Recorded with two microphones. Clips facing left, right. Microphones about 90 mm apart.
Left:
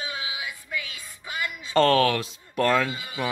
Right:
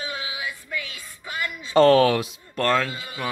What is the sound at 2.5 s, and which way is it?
Speech, 10° left (ahead or behind).